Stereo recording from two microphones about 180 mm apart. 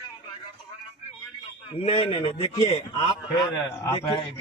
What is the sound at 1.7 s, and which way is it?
A man's voice, 30° left (ahead or behind).